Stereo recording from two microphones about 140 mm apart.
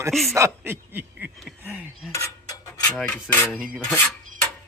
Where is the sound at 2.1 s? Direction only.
25° left (ahead or behind).